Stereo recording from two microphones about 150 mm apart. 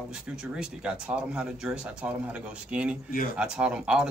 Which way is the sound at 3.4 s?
5° right (ahead or behind).